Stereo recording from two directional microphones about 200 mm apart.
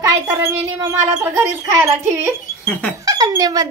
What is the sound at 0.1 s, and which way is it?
Speech, 15° right (ahead or behind).